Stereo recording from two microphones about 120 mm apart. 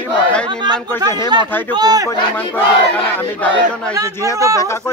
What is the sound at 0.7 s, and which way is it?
Speech, 35° right (ahead or behind).